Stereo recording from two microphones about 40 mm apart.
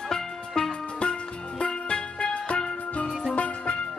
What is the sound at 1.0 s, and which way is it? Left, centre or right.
Music, left.